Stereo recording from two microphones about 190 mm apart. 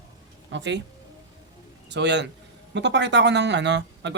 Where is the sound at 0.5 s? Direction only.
70° right (ahead or behind).